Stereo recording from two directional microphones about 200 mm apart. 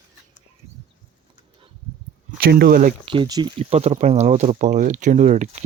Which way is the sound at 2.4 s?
50° right (ahead or behind).